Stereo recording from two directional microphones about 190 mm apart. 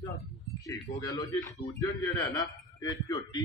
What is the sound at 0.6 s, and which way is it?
A man's voice, 20° left (ahead or behind).